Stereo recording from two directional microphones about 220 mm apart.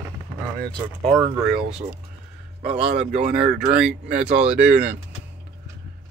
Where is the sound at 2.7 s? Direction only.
30° right (ahead or behind).